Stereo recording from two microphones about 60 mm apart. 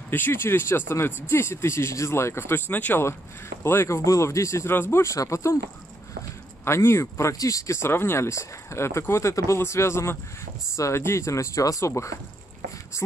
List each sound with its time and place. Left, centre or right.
0.1 s speech: left
3.6 s speech: left
4.6 s speech: left
5.0 s speech: left
6.6 s speech: left
7.3 s speech: left
9.6 s speech: left